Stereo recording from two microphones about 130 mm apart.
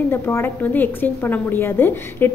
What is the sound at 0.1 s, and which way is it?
A woman's voice, 20° left (ahead or behind).